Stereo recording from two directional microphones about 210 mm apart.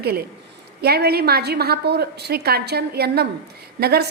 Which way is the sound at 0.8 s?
50° right (ahead or behind).